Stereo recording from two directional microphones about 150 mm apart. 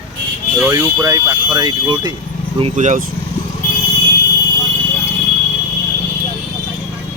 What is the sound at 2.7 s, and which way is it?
Speech, 55° right (ahead or behind).